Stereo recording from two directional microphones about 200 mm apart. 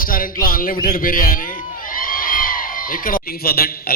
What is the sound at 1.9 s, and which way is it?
Children shouting, 45° left (ahead or behind).